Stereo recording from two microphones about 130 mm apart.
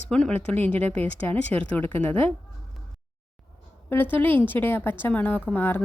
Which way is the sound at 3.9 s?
15° left (ahead or behind).